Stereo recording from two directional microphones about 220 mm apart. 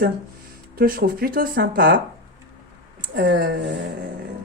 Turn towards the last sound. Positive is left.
turn(degrees=-50)  # may be behind; listen again after turning